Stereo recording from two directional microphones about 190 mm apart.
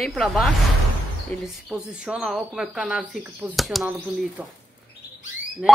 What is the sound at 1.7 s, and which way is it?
Speech, 5° right (ahead or behind).